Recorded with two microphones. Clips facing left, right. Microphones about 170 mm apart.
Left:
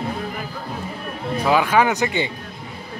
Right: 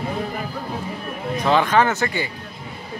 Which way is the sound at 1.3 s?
10° left (ahead or behind).